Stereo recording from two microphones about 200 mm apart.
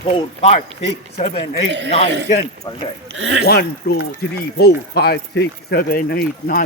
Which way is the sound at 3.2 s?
60° right (ahead or behind).